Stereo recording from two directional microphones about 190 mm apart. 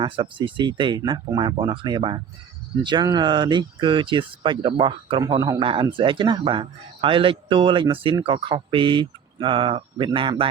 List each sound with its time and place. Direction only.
0.0 s speech: 25° right (ahead or behind)